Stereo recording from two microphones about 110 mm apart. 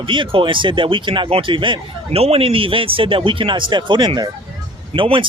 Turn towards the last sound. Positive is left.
turn(degrees=-50)  # may be behind; listen again after turning